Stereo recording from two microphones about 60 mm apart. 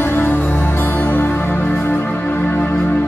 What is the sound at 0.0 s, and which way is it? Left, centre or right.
Music, left.